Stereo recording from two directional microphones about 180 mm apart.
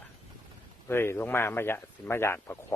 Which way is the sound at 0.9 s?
15° left (ahead or behind).